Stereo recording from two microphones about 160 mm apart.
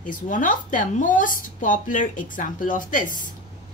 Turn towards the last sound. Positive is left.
turn(degrees=55)  # may be behind; listen again after turning